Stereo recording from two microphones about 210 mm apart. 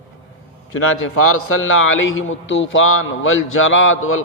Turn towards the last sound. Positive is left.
turn(degrees=75)  # may be behind; listen again after turning